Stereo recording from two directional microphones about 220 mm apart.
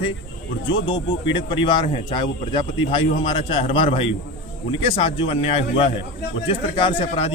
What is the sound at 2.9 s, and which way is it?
A man's voice, 25° left (ahead or behind).